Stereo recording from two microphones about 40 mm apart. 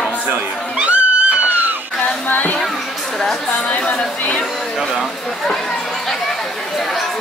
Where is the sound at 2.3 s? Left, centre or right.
Left.